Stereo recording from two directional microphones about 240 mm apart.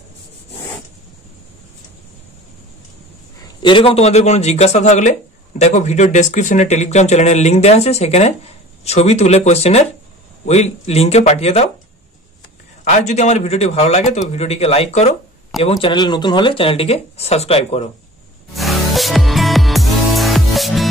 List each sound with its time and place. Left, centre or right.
3.6 s speech: left
13.0 s speech: left
18.5 s music: centre